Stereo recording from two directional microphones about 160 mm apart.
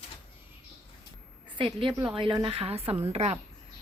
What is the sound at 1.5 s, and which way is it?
A woman's voice, 30° right (ahead or behind).